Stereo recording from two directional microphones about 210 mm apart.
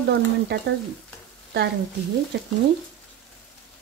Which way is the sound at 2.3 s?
55° right (ahead or behind).